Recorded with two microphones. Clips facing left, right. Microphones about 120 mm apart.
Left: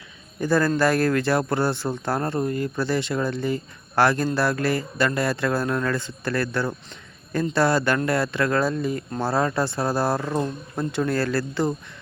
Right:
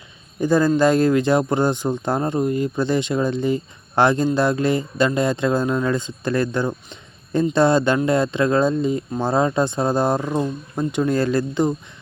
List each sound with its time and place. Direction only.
0.3 s speech: 15° right (ahead or behind)